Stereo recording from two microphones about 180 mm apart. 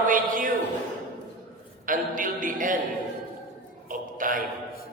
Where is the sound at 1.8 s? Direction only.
50° right (ahead or behind).